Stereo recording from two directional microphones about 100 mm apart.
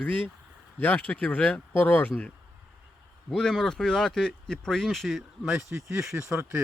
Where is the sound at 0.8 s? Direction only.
15° left (ahead or behind).